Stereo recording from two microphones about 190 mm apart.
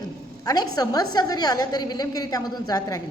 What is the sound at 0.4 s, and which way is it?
A woman's voice, 20° left (ahead or behind).